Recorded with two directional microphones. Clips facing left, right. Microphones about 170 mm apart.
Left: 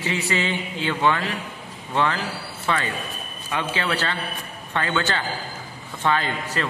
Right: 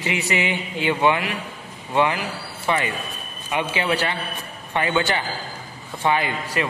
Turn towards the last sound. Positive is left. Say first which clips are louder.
# right 2 dB
turn(degrees=-15)  # may be behind; listen again after turning